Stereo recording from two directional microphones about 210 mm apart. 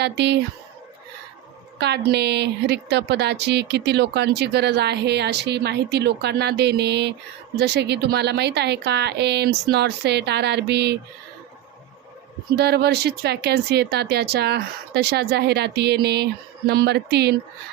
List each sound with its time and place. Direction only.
0.0 s speech: 55° right (ahead or behind)
1.8 s a woman's voice: 50° right (ahead or behind)
12.5 s a woman's voice: 50° right (ahead or behind)